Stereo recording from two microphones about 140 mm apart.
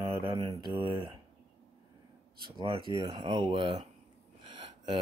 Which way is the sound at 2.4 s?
35° right (ahead or behind).